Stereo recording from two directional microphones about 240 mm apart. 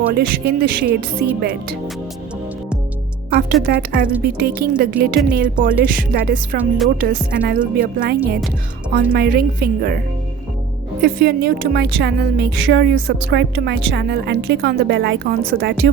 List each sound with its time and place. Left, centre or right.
0.1 s speech: right
1.2 s music: centre
3.3 s speech: right
11.0 s a woman's voice: right